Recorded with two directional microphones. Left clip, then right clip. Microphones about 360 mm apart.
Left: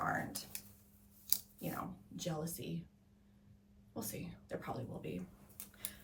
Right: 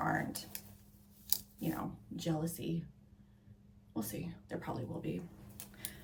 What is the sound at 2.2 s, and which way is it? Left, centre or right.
Speech, centre.